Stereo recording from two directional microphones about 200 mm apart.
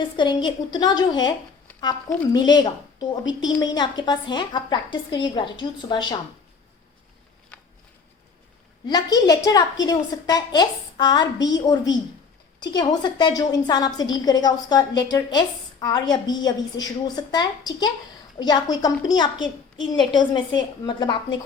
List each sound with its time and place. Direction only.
0.2 s a woman's voice: 20° left (ahead or behind)
8.9 s a woman's voice: 20° left (ahead or behind)